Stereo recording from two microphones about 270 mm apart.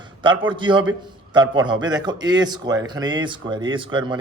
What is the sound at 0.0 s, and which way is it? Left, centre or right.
A man's voice, centre.